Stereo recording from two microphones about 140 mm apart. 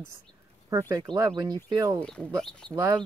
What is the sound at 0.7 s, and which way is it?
Speech, 25° right (ahead or behind).